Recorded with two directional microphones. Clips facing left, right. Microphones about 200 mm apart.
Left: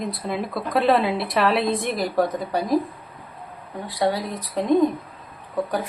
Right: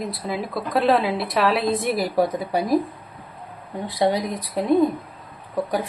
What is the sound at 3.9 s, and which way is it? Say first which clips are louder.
Speech: right 2 dB; 20° right (ahead or behind).